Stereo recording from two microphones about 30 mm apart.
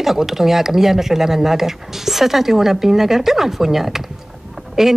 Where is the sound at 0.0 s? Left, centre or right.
Centre.